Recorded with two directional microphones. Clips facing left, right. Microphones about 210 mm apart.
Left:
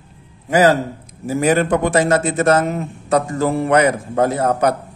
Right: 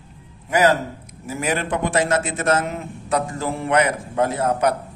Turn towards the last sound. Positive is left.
turn(degrees=40)  # may be behind; listen again after turning